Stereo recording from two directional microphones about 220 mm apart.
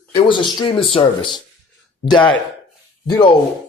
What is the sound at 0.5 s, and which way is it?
Speech, 25° left (ahead or behind).